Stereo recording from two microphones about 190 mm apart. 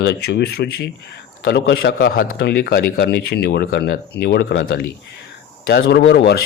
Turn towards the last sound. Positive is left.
turn(degrees=65)  # may be behind; listen again after turning